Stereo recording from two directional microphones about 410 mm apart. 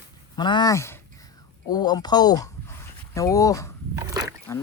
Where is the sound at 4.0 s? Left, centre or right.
Centre.